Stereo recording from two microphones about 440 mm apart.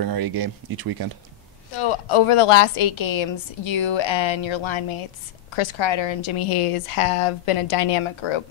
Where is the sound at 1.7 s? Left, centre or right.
Left.